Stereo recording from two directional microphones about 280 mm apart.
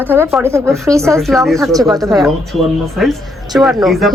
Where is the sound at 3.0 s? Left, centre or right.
Centre.